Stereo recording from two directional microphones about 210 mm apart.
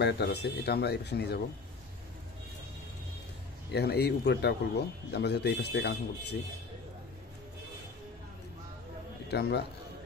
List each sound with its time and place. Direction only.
0.0 s speech: 50° left (ahead or behind)
3.7 s speech: 50° left (ahead or behind)
9.3 s speech: 50° left (ahead or behind)